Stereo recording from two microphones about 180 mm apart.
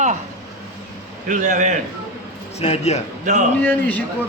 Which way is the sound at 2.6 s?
35° left (ahead or behind).